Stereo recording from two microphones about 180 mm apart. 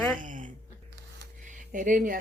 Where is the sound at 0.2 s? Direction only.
45° right (ahead or behind).